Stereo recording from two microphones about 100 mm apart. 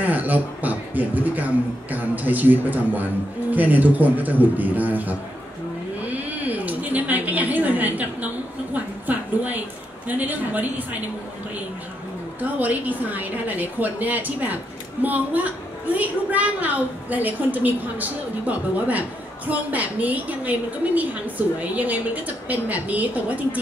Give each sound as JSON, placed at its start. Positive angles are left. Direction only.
{"t": 0.0, "sound": "a woman's voice", "side_deg": -15}
{"t": 6.0, "sound": "a sound", "side_deg": -15}
{"t": 10.0, "sound": "a woman's voice", "side_deg": -15}
{"t": 12.4, "sound": "a woman's voice", "side_deg": -15}